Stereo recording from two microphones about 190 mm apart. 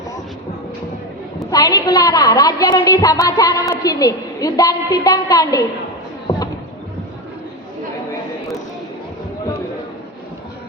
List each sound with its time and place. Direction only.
1.5 s a woman's voice: 20° left (ahead or behind)